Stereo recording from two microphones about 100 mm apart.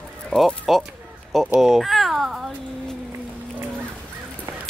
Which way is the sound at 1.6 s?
Centre (ahead or behind).